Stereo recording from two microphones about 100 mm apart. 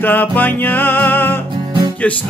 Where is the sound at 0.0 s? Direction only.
20° left (ahead or behind).